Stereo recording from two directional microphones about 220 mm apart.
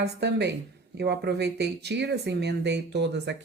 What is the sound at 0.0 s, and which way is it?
Speech, 50° right (ahead or behind).